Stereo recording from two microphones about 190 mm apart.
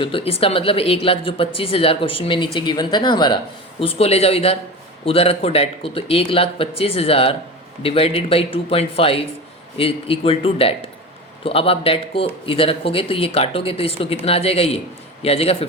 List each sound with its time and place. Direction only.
0.0 s speech: 30° left (ahead or behind)